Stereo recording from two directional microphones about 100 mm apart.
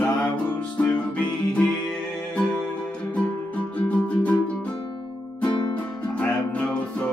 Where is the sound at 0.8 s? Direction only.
15° left (ahead or behind).